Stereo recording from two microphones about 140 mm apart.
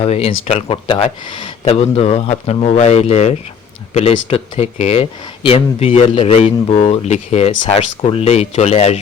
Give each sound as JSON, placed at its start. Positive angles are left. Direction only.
{"t": 0.0, "sound": "speech", "side_deg": 45}